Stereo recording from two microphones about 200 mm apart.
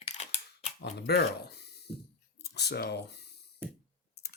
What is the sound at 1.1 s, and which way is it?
Speech, 55° left (ahead or behind).